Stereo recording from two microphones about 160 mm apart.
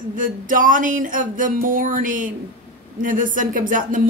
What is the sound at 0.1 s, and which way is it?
A woman's voice, 55° right (ahead or behind).